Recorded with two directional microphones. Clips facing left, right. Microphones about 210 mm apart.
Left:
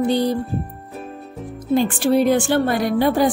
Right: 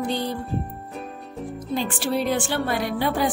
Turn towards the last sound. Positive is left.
turn(degrees=40)  # may be behind; listen again after turning